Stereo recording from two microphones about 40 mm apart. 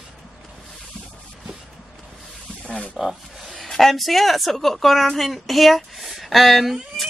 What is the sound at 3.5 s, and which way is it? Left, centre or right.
A woman's voice, centre.